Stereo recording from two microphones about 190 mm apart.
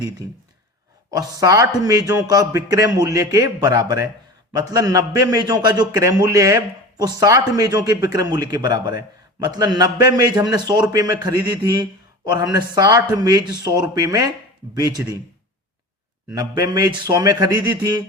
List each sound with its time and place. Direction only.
1.1 s a man's voice: 20° right (ahead or behind)
16.3 s a man's voice: 20° right (ahead or behind)